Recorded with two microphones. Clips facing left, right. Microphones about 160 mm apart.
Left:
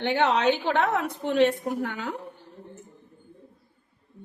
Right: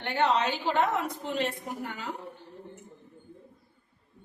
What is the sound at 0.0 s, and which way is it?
A woman's voice, 75° left (ahead or behind).